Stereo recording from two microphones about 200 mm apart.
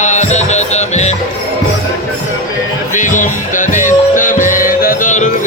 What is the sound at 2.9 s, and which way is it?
Music, 40° left (ahead or behind).